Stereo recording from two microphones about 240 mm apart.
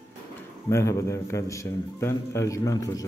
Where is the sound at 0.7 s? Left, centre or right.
Centre.